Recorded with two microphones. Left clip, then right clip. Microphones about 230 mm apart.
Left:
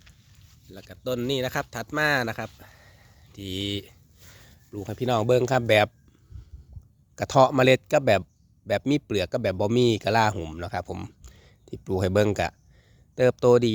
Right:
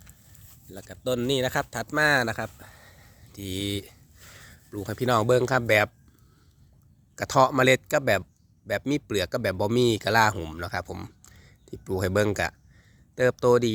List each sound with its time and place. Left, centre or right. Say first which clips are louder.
0.7 s speech: right 2 dB; centre; by 5.9 s left
7.2 s speech: left 2 dB; left